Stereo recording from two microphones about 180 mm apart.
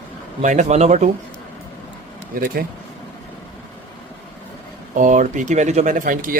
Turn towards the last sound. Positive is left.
turn(degrees=-50)  # may be behind; listen again after turning